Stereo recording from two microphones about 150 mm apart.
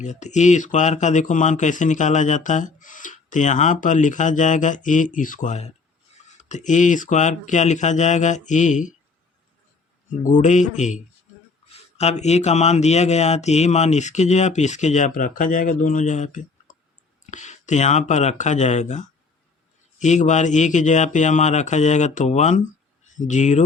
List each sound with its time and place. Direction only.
0.0 s speech: 50° left (ahead or behind)
10.1 s speech: 55° left (ahead or behind)